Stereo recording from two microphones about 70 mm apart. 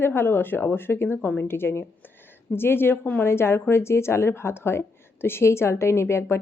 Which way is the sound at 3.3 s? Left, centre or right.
Left.